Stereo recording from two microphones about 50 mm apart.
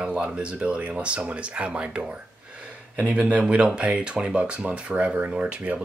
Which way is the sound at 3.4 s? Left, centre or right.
Centre.